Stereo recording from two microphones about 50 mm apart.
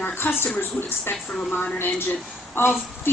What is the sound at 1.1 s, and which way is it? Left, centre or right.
Speech, left.